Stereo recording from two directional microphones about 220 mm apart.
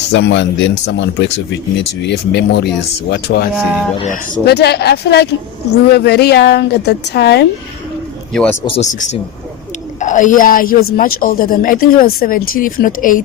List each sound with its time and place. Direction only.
0.1 s speech: 55° left (ahead or behind)
3.5 s speech: 5° right (ahead or behind)
3.9 s speech: 30° left (ahead or behind)
4.4 s speech: 50° left (ahead or behind)
8.3 s speech: 5° left (ahead or behind)
8.6 s speech: 30° left (ahead or behind)